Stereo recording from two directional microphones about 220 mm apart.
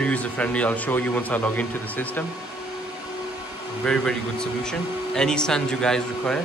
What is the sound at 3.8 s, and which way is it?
Speech, 5° left (ahead or behind).